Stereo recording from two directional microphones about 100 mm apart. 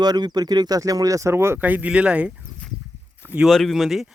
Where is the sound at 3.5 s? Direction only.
Centre (ahead or behind).